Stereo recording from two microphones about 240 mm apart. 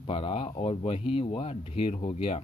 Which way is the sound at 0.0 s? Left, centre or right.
Left.